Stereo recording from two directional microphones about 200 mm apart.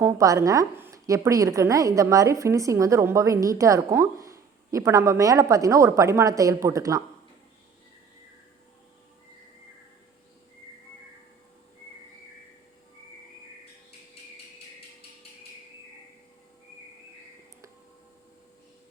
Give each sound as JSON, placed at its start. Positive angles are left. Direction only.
{"t": 0.0, "sound": "a woman's voice", "side_deg": -15}